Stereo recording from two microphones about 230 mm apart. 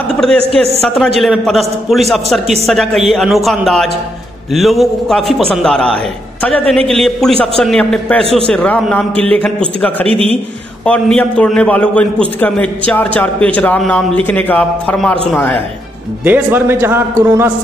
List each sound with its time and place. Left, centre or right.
0.1 s a sound: centre
0.6 s a man's voice: centre
10.0 s a man's voice: right
10.9 s a man's voice: centre
16.3 s a man's voice: centre